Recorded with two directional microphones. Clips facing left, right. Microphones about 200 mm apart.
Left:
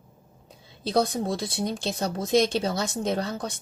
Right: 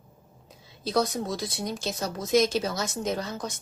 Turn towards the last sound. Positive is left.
turn(degrees=30)  # may be behind; listen again after turning